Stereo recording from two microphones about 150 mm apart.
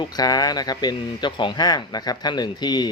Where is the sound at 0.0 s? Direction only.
25° left (ahead or behind).